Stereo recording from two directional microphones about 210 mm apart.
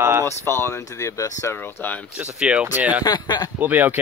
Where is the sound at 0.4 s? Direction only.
10° left (ahead or behind).